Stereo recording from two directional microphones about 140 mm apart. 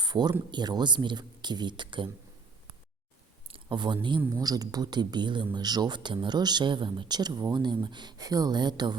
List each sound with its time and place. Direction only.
0.0 s speech: 30° right (ahead or behind)
3.5 s speech: 35° right (ahead or behind)